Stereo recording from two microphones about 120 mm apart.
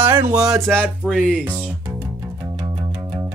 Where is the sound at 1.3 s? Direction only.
10° right (ahead or behind).